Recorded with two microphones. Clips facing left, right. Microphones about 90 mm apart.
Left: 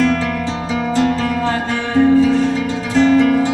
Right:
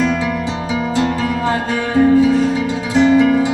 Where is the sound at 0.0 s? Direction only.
15° right (ahead or behind).